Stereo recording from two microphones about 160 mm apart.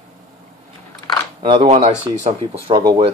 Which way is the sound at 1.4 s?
35° right (ahead or behind).